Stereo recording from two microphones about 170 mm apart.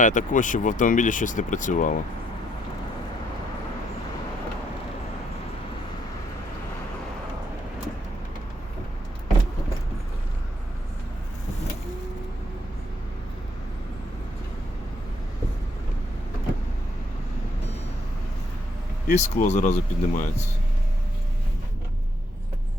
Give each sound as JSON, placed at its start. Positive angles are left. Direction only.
{"t": 0.0, "sound": "speech", "side_deg": 50}
{"t": 19.1, "sound": "speech", "side_deg": 40}